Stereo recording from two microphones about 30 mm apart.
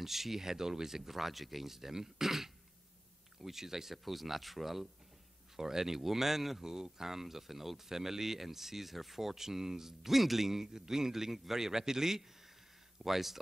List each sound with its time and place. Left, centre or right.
0.0 s speech: centre
6.6 s speech: centre